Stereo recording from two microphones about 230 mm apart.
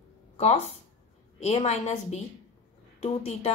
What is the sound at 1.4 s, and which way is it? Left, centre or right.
Speech, left.